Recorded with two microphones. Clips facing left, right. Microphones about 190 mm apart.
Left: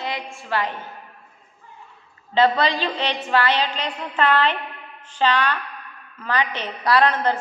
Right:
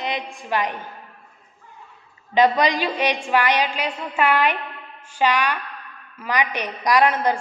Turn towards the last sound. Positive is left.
turn(degrees=-10)  # may be behind; listen again after turning